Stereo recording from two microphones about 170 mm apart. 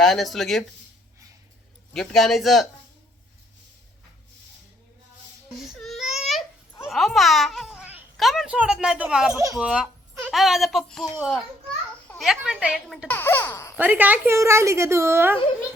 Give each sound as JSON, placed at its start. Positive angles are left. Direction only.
{"t": 0.0, "sound": "a woman's voice", "side_deg": 0}
{"t": 1.9, "sound": "a woman's voice", "side_deg": 0}
{"t": 5.5, "sound": "baby cry", "side_deg": 0}
{"t": 6.8, "sound": "babbling", "side_deg": 0}
{"t": 8.2, "sound": "a woman's voice", "side_deg": 0}
{"t": 13.1, "sound": "a child's voice", "side_deg": 15}
{"t": 13.7, "sound": "a woman's voice", "side_deg": -10}